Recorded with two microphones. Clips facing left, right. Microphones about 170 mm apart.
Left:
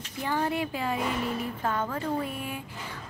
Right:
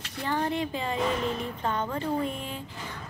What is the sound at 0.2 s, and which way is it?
A woman's voice, 5° left (ahead or behind).